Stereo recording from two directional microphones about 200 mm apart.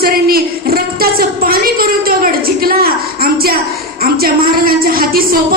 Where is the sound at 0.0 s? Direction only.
50° right (ahead or behind).